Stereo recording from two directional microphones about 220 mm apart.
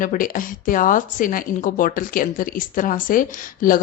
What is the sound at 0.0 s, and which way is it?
A woman's voice, 40° left (ahead or behind).